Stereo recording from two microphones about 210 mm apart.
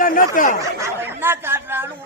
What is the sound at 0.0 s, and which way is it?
Speech, 40° left (ahead or behind).